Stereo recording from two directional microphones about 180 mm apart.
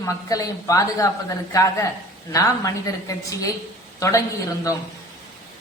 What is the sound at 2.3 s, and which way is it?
A woman's voice, 20° left (ahead or behind).